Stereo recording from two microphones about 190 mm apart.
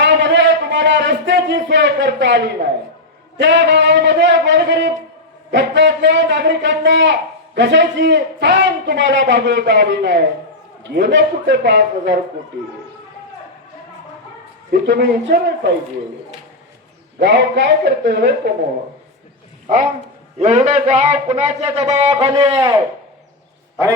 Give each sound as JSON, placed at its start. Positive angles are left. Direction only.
{"t": 0.0, "sound": "a sound", "side_deg": -65}
{"t": 3.4, "sound": "a man's voice", "side_deg": -65}
{"t": 14.7, "sound": "a man's voice", "side_deg": -60}
{"t": 17.2, "sound": "a man's voice", "side_deg": -65}
{"t": 20.4, "sound": "a man's voice", "side_deg": -40}
{"t": 22.1, "sound": "a man's voice", "side_deg": -20}